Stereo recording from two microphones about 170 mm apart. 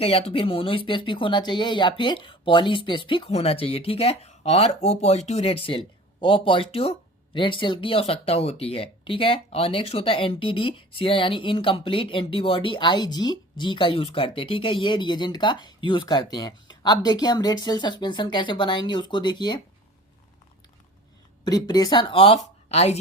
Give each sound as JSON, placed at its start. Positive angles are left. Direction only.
{"t": 0.0, "sound": "speech", "side_deg": 35}
{"t": 21.4, "sound": "speech", "side_deg": 25}